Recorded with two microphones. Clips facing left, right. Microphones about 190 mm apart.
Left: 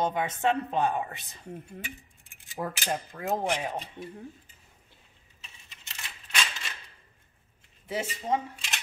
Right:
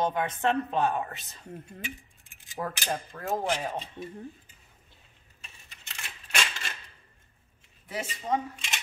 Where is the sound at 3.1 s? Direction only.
15° left (ahead or behind).